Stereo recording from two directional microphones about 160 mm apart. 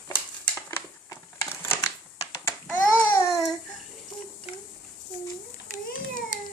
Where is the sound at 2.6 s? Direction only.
10° left (ahead or behind).